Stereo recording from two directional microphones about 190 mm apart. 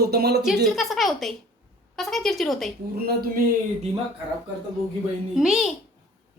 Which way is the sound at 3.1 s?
50° right (ahead or behind).